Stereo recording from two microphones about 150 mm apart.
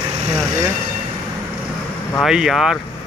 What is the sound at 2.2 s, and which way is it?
Speech, 5° right (ahead or behind).